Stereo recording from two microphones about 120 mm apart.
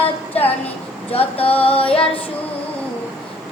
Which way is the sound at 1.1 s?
55° left (ahead or behind).